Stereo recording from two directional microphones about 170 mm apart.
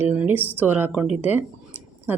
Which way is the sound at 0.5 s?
10° right (ahead or behind).